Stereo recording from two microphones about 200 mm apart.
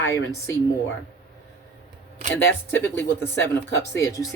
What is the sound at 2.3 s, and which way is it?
Speech, 10° left (ahead or behind).